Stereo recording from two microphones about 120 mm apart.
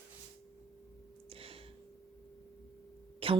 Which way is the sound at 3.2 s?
50° right (ahead or behind).